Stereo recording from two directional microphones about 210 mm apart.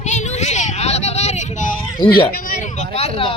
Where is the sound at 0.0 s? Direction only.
35° left (ahead or behind).